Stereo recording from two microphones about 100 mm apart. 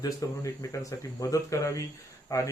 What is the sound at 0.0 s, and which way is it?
Speech, 35° left (ahead or behind).